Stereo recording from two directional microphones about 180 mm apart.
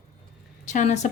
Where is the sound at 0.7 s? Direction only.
40° left (ahead or behind).